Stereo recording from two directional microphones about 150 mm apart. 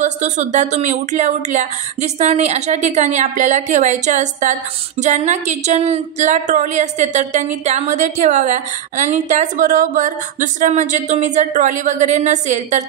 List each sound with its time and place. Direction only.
0.0 s speech: 50° right (ahead or behind)